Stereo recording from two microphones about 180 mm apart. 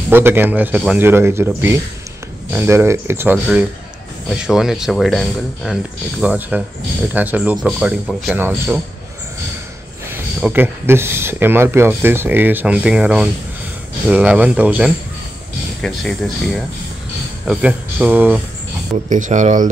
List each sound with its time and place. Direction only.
0.1 s speech: 10° right (ahead or behind)
4.5 s speech: centre (ahead or behind)
10.4 s speech: 10° right (ahead or behind)
19.0 s speech: 45° right (ahead or behind)